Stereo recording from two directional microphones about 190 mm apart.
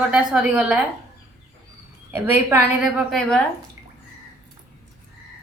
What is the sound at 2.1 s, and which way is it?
A woman's voice, 10° right (ahead or behind).